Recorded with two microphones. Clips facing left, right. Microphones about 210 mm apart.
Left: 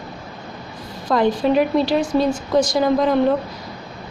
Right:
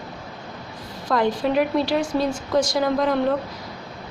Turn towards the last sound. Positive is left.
turn(degrees=20)  # may be behind; listen again after turning